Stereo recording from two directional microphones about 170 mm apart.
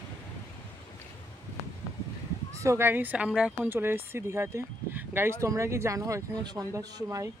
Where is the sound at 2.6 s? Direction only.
15° right (ahead or behind).